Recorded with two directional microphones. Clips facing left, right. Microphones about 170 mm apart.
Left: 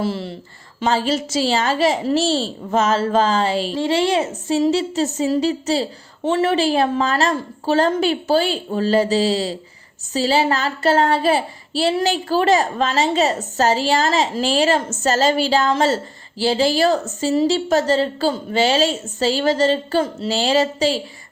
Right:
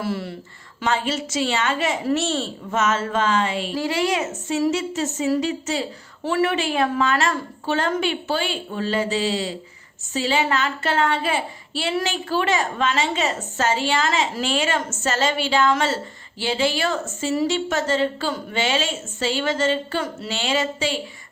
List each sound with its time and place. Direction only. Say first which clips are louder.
0.0 s speech: left 3 dB; 30° left (ahead or behind)